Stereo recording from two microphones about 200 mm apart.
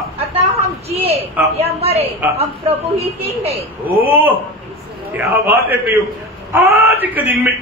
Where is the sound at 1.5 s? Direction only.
30° right (ahead or behind).